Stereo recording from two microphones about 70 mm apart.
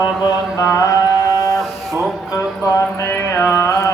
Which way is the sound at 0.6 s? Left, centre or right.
Left.